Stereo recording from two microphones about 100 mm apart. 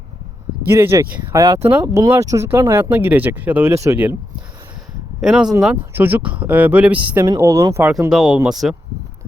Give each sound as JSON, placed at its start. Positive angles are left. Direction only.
{"t": 0.6, "sound": "speech", "side_deg": -25}
{"t": 5.2, "sound": "speech", "side_deg": -5}
{"t": 5.9, "sound": "speech", "side_deg": -20}
{"t": 7.3, "sound": "speech", "side_deg": -35}
{"t": 8.1, "sound": "speech", "side_deg": -5}